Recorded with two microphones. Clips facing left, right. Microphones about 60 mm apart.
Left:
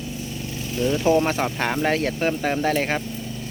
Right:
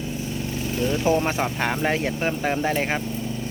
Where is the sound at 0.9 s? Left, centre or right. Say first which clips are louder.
Left 3 dB; centre.